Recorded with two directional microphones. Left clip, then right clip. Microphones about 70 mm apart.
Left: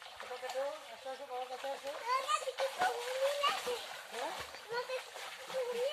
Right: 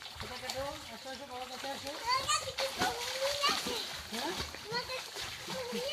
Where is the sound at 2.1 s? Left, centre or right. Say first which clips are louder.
Right 2 dB; left.